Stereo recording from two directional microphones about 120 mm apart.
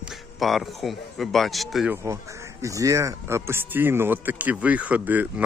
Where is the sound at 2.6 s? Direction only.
25° right (ahead or behind).